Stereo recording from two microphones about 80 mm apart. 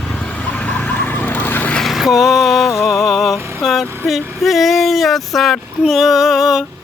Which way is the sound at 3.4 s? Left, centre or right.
Right.